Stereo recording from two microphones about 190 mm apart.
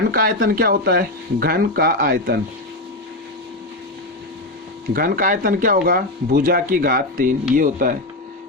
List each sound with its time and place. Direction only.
0.1 s speech: 50° right (ahead or behind)
4.9 s speech: 45° right (ahead or behind)